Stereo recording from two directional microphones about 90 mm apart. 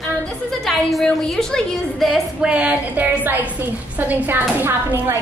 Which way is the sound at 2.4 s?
15° right (ahead or behind).